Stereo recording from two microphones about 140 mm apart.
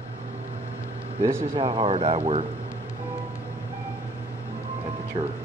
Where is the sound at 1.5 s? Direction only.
40° right (ahead or behind).